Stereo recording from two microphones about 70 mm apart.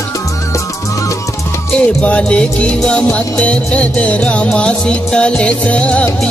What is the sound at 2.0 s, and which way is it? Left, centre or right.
Music, centre.